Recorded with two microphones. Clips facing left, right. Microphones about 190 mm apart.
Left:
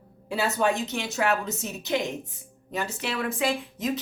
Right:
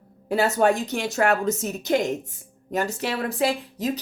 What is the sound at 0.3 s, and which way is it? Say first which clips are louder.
A woman's voice: right 5 dB; 45° right (ahead or behind).